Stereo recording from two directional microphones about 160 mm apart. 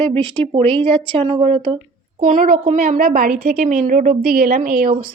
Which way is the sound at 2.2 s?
55° right (ahead or behind).